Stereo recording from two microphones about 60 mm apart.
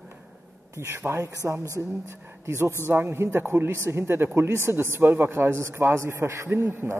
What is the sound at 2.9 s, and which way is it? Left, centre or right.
A man's voice, right.